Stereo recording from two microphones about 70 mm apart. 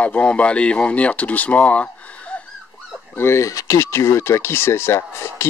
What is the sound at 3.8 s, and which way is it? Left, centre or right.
Speech, left.